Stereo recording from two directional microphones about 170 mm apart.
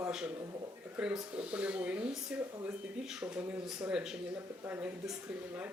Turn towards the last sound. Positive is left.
turn(degrees=-10)  # may be behind; listen again after turning